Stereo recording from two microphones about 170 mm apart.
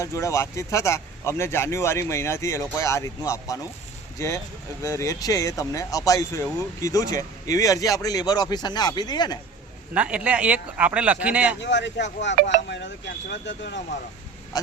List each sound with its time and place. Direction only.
0.0 s speech: 15° left (ahead or behind)
4.8 s speech: 15° left (ahead or behind)
9.9 s speech: 5° right (ahead or behind)
11.6 s speech: 90° left
14.5 s speech: 20° left (ahead or behind)